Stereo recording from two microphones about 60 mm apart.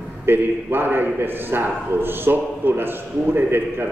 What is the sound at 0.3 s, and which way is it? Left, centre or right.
A man's voice, right.